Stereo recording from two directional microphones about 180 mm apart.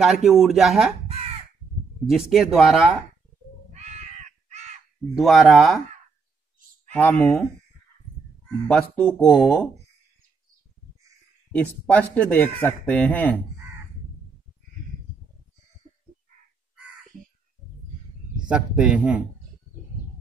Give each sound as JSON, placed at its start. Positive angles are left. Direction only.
{"t": 0.0, "sound": "speech", "side_deg": 0}
{"t": 1.0, "sound": "crow", "side_deg": -35}
{"t": 2.0, "sound": "speech", "side_deg": 0}
{"t": 3.7, "sound": "crow", "side_deg": -40}
{"t": 5.1, "sound": "speech", "side_deg": 0}
{"t": 6.9, "sound": "speech", "side_deg": 10}
{"t": 8.6, "sound": "speech", "side_deg": 5}
{"t": 11.6, "sound": "speech", "side_deg": 10}
{"t": 18.5, "sound": "speech", "side_deg": -5}